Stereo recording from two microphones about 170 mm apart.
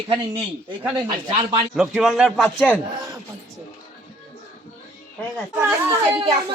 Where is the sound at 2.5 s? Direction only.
10° left (ahead or behind).